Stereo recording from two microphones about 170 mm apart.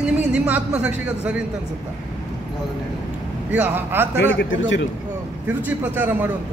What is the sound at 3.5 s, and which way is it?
Speech, 10° right (ahead or behind).